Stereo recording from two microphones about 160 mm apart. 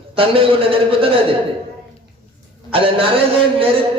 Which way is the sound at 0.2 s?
35° right (ahead or behind).